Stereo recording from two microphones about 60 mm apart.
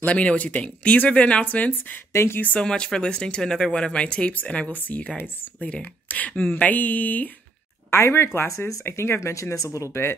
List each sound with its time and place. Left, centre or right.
0.0 s speech: left
2.1 s speech: left
2.6 s speech: centre; by 7.2 s left
7.9 s speech: left
8.5 s speech: left
8.8 s speech: left
9.3 s speech: left